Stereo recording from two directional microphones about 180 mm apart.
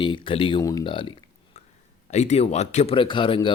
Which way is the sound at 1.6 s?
40° left (ahead or behind).